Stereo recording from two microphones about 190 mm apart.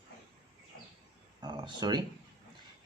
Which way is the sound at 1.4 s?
20° right (ahead or behind).